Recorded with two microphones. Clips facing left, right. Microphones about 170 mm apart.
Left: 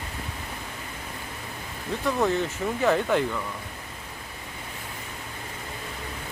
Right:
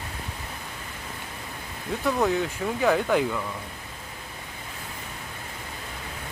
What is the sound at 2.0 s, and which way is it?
Speech, centre (ahead or behind).